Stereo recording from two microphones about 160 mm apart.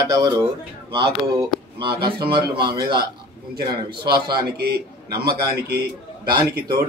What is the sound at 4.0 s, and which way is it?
Speech, 30° right (ahead or behind).